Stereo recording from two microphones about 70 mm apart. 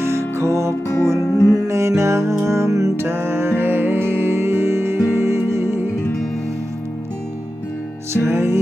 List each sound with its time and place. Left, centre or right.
0.0 s music: right
1.2 s music: left
1.7 s music: right
8.1 s music: right